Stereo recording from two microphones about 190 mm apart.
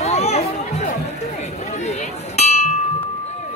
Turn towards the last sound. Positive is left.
turn(degrees=35)  # may be behind; listen again after turning